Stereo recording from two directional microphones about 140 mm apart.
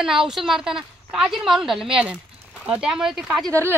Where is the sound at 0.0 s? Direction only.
5° right (ahead or behind).